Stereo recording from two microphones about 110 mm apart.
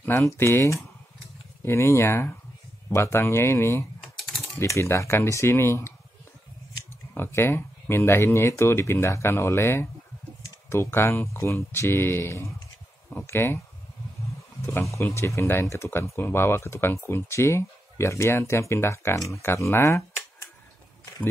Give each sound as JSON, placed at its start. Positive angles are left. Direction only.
{"t": 0.0, "sound": "speech", "side_deg": 25}
{"t": 7.2, "sound": "speech", "side_deg": 20}
{"t": 14.7, "sound": "speech", "side_deg": 25}